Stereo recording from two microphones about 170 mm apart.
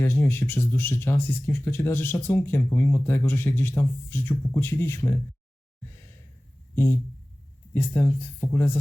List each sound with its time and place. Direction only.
0.0 s speech: 15° left (ahead or behind)
6.7 s a sound: 15° left (ahead or behind)
7.7 s speech: 15° left (ahead or behind)